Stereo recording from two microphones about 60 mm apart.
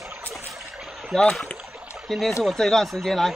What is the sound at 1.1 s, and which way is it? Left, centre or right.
Speech, centre.